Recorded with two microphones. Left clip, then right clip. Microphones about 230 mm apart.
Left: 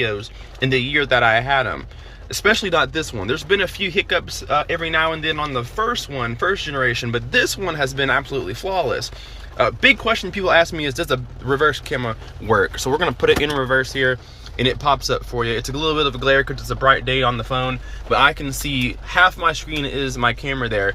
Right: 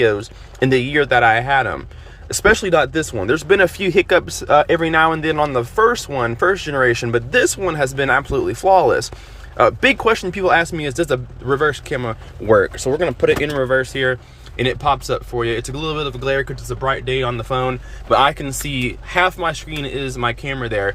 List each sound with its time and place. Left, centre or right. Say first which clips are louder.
0.0 s speech: right 6 dB; right